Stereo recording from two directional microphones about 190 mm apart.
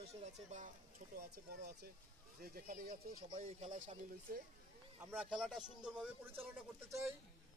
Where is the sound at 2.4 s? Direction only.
50° right (ahead or behind).